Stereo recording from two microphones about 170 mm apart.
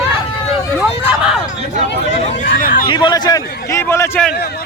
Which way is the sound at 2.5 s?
55° left (ahead or behind).